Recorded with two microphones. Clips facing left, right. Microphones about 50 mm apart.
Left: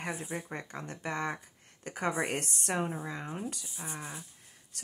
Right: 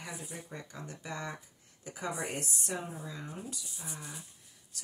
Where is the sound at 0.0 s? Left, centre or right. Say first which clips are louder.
Left 7 dB; left.